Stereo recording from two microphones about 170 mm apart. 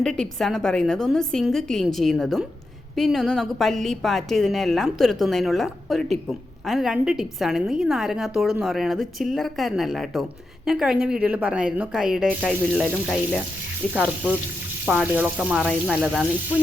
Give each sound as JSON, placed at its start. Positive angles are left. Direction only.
{"t": 0.0, "sound": "a woman's voice", "side_deg": 5}
{"t": 13.9, "sound": "speech", "side_deg": -10}